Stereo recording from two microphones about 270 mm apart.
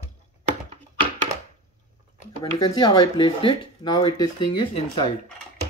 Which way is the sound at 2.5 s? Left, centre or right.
Centre.